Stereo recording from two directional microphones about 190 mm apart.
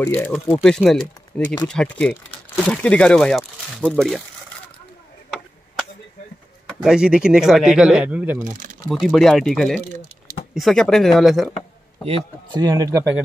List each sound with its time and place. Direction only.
0.0 s speech: 10° left (ahead or behind)
6.7 s speech: 5° right (ahead or behind)
8.5 s speech: 45° right (ahead or behind)
8.8 s speech: centre (ahead or behind)
12.5 s speech: 20° right (ahead or behind)